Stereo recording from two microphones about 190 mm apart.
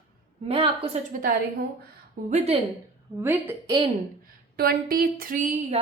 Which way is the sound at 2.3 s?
35° right (ahead or behind).